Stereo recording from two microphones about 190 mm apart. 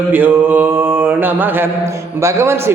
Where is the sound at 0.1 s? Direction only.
10° right (ahead or behind).